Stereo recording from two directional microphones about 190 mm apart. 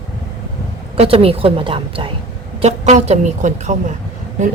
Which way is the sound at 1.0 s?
30° right (ahead or behind).